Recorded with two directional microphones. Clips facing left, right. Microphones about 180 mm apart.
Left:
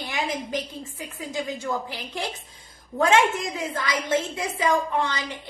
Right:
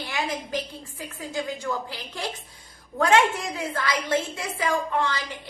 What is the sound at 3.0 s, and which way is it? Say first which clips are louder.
A woman's voice: even; 20° left (ahead or behind).